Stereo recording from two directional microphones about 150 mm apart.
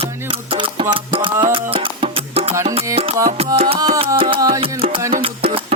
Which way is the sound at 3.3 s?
40° right (ahead or behind).